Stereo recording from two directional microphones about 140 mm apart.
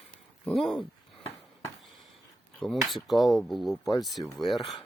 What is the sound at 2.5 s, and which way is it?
Dishes, centre (ahead or behind).